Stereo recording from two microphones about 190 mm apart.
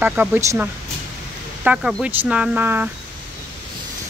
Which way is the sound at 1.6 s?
5° right (ahead or behind).